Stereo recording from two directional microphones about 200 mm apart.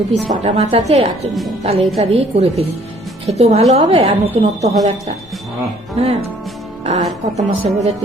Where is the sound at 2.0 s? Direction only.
30° right (ahead or behind).